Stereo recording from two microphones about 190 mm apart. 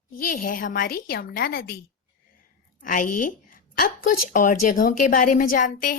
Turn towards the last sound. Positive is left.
turn(degrees=45)  # may be behind; listen again after turning